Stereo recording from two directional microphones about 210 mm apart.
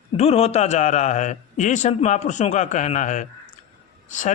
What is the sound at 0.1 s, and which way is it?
A man's voice, 30° left (ahead or behind).